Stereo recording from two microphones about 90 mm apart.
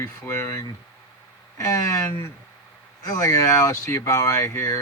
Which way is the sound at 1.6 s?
40° left (ahead or behind).